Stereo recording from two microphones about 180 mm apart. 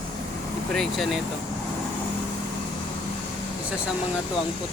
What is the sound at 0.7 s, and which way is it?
Speech, centre (ahead or behind).